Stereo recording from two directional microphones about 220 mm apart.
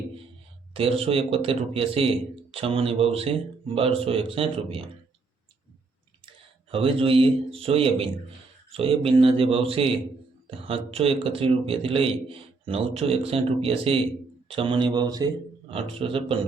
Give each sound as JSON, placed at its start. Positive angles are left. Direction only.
{"t": 0.7, "sound": "a man's voice", "side_deg": -25}
{"t": 6.2, "sound": "a man's voice", "side_deg": -25}